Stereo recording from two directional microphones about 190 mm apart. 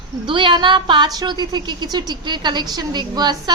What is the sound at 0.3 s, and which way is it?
A woman's voice, 25° right (ahead or behind).